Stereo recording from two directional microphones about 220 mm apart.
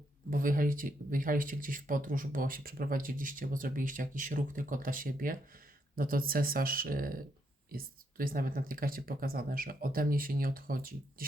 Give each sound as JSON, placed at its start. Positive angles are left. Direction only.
{"t": 0.3, "sound": "speech", "side_deg": -40}